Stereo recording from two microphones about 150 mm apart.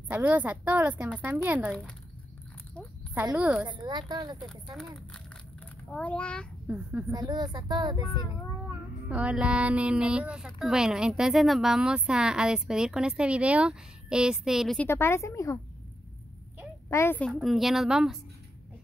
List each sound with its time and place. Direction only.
0.1 s speech: 10° right (ahead or behind)
3.3 s speech: 10° right (ahead or behind)
3.6 s speech: 30° right (ahead or behind)
5.9 s a woman's voice: 10° left (ahead or behind)
6.7 s speech: 10° right (ahead or behind)
7.1 s speech: 25° right (ahead or behind)
9.1 s speech: 10° right (ahead or behind)
14.8 s a woman's voice: 15° left (ahead or behind)
16.9 s a woman's voice: 15° left (ahead or behind)
17.2 s speech: centre (ahead or behind)